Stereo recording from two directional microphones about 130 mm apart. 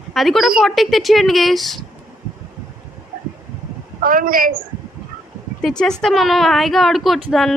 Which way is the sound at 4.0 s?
90° right.